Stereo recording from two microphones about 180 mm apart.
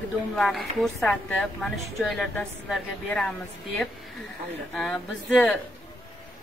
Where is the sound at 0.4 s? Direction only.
Centre (ahead or behind).